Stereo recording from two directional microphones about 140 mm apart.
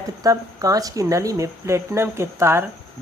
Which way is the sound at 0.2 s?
25° right (ahead or behind).